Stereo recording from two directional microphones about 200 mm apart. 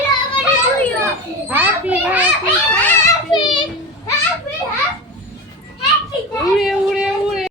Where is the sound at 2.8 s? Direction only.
10° left (ahead or behind).